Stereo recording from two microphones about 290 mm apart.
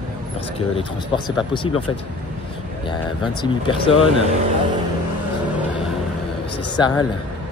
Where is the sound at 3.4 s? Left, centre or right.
Centre.